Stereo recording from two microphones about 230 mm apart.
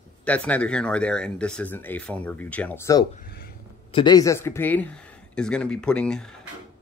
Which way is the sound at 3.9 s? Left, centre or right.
Centre.